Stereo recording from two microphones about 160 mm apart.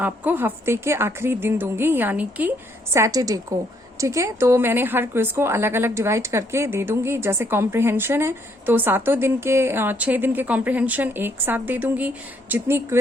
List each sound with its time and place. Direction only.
0.0 s a woman's voice: 10° right (ahead or behind)